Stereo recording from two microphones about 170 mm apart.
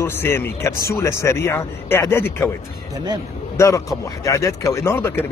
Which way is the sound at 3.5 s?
20° left (ahead or behind).